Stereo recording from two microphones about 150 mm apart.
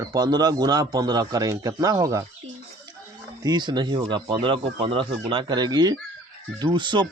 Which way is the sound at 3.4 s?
30° right (ahead or behind).